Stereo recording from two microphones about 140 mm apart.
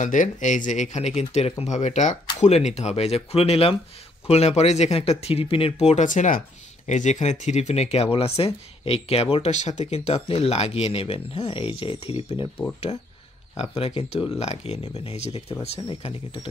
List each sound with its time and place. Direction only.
0.0 s speech: 65° left (ahead or behind); by 12.4 s 40° left (ahead or behind)
13.6 s speech: 45° left (ahead or behind)